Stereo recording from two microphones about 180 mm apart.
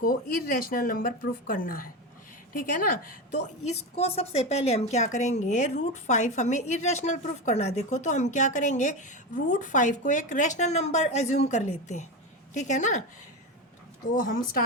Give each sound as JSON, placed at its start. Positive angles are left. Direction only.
{"t": 0.0, "sound": "a woman's voice", "side_deg": 50}
{"t": 14.1, "sound": "speech", "side_deg": 50}